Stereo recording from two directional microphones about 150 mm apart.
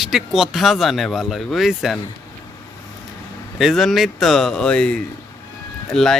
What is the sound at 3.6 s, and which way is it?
Speech, centre (ahead or behind).